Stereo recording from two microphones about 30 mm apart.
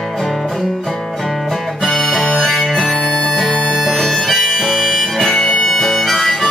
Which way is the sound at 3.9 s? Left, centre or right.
Centre.